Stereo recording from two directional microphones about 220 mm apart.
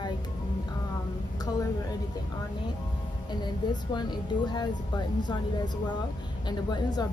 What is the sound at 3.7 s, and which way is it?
A woman's voice, 20° left (ahead or behind).